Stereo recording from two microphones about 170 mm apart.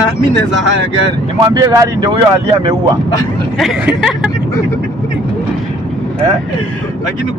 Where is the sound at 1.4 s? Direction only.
20° right (ahead or behind).